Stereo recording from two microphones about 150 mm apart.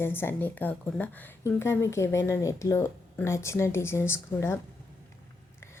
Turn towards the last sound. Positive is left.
turn(degrees=15)  # may be behind; listen again after turning